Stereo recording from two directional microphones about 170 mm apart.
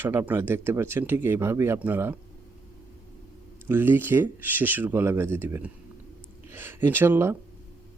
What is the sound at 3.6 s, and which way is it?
Speech, 15° right (ahead or behind).